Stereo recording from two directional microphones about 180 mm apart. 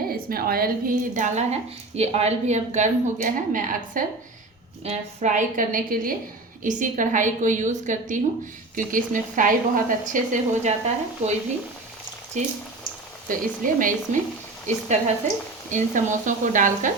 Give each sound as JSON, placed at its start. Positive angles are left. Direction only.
{"t": 0.1, "sound": "a woman's voice", "side_deg": -55}
{"t": 12.4, "sound": "a woman's voice", "side_deg": -40}
{"t": 15.7, "sound": "a woman's voice", "side_deg": -45}